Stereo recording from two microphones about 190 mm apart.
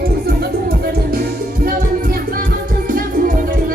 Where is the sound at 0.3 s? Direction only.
55° right (ahead or behind).